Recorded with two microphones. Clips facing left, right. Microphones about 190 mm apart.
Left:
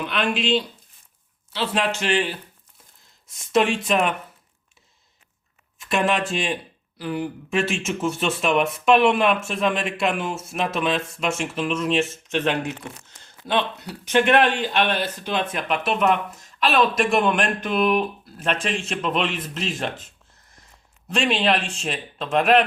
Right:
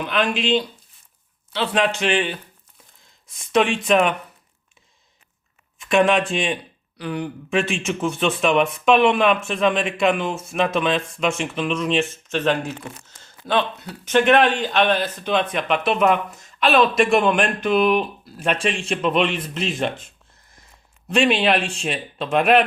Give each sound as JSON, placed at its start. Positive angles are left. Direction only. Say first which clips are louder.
{"t": 0.0, "sound": "speech", "louder": "right 2 dB", "side_deg": 0}
{"t": 3.5, "sound": "speech", "louder": "right 2 dB", "side_deg": 5}
{"t": 5.8, "sound": "speech", "louder": "right 5 dB", "side_deg": 5}
{"t": 12.3, "sound": "speech", "louder": "right 3 dB", "side_deg": 15}
{"t": 13.8, "sound": "speech", "louder": "right 3 dB", "side_deg": 10}
{"t": 14.8, "sound": "speech", "louder": "right 4 dB", "side_deg": -55}
{"t": 15.4, "sound": "speech", "louder": "right 3 dB", "side_deg": 5}
{"t": 21.1, "sound": "speech", "louder": "right 3 dB", "side_deg": 0}